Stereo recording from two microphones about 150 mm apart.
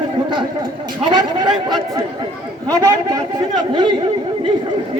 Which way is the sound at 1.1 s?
30° right (ahead or behind).